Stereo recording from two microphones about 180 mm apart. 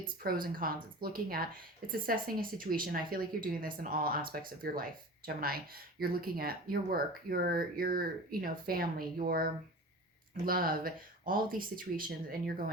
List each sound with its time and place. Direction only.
0.2 s speech: 55° right (ahead or behind)